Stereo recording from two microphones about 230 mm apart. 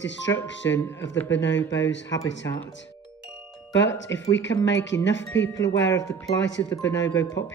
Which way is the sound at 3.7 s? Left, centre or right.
Left.